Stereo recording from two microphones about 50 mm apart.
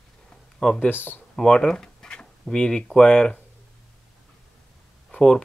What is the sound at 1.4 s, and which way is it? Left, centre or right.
Speech, centre.